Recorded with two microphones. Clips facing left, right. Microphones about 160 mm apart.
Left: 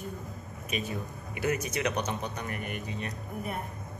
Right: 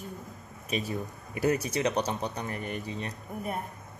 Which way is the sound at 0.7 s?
35° right (ahead or behind).